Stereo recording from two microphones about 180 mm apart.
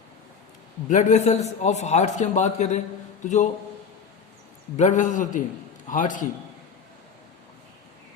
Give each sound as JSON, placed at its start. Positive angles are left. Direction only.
{"t": 0.9, "sound": "a man's voice", "side_deg": 40}
{"t": 4.8, "sound": "a man's voice", "side_deg": 40}